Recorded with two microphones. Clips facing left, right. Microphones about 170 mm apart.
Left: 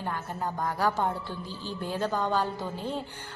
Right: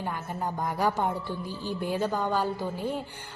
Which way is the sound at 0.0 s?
10° right (ahead or behind).